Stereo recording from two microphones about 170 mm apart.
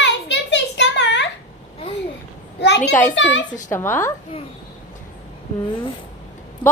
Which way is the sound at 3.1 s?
90° left.